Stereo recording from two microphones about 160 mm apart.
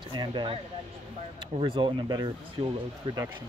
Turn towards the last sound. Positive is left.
turn(degrees=-30)  # may be behind; listen again after turning